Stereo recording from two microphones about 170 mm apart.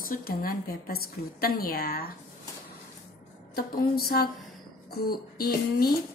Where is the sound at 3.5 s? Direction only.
65° left (ahead or behind).